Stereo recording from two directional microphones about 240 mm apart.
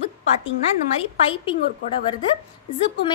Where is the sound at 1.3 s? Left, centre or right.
Left.